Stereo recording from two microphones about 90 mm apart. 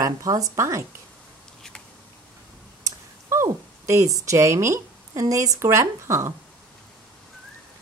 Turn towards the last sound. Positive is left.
turn(degrees=-35)  # may be behind; listen again after turning